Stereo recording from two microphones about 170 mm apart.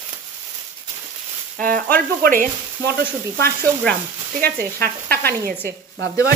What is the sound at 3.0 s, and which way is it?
Sizzle, 10° left (ahead or behind).